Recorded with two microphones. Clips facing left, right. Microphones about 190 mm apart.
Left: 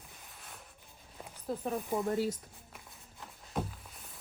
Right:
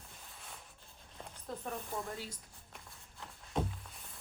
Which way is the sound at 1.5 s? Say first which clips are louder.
Left 8 dB; 20° left (ahead or behind).